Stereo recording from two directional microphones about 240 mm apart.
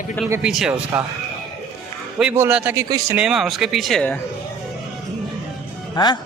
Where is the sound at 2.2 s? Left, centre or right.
Centre.